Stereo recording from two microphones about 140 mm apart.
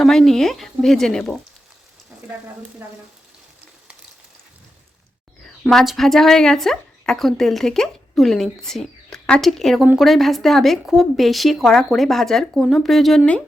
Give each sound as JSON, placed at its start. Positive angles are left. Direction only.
{"t": 0.0, "sound": "a woman's voice", "side_deg": 5}
{"t": 5.7, "sound": "a woman's voice", "side_deg": 0}